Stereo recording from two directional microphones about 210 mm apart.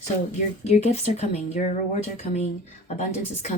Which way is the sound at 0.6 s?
30° left (ahead or behind).